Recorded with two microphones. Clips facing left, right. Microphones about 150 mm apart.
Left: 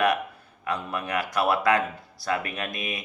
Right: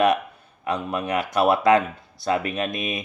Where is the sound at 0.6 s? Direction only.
20° right (ahead or behind).